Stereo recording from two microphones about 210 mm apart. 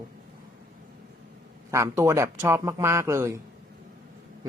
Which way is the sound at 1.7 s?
15° right (ahead or behind).